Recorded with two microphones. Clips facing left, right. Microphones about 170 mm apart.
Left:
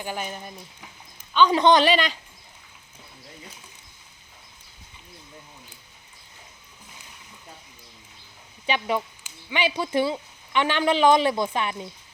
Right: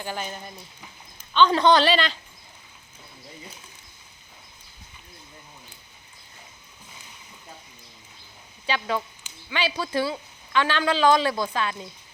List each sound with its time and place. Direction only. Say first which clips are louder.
0.0 s a man's voice: left 1 dB; 10° left (ahead or behind)
8.6 s speech: left 2 dB; 20° left (ahead or behind)